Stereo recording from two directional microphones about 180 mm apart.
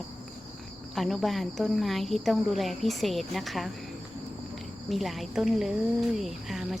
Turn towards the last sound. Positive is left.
turn(degrees=0)  # may be behind; listen again after turning